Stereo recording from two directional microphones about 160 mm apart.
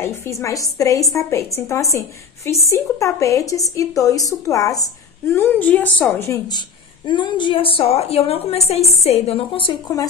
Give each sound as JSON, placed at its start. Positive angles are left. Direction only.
{"t": 0.0, "sound": "a woman's voice", "side_deg": 15}
{"t": 7.1, "sound": "a woman's voice", "side_deg": 30}